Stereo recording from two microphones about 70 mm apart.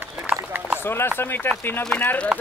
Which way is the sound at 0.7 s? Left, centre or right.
Left.